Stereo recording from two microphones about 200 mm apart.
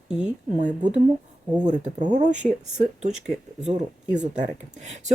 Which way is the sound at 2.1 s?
40° right (ahead or behind).